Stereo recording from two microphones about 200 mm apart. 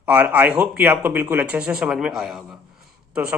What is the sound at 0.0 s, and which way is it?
A man's voice, 10° right (ahead or behind).